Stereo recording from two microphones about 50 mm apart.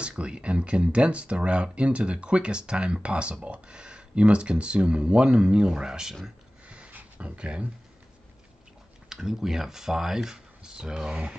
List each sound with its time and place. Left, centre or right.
0.0 s speech: right
6.9 s a sound: right
9.1 s speech: centre